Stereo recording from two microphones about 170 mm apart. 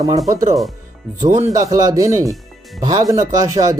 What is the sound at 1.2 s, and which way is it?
Speech, 45° right (ahead or behind).